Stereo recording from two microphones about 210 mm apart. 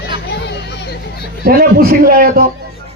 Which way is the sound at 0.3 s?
55° left (ahead or behind).